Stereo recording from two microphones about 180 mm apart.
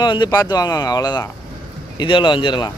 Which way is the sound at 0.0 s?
25° left (ahead or behind).